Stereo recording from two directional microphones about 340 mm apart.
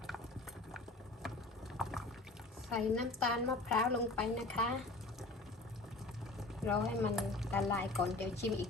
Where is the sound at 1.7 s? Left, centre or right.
Centre.